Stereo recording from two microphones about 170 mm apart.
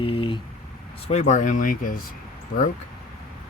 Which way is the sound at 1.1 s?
40° left (ahead or behind).